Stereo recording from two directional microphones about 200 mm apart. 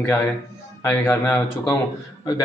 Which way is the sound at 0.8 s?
10° left (ahead or behind).